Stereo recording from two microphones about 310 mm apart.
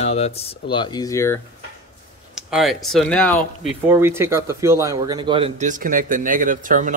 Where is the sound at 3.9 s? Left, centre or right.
Centre.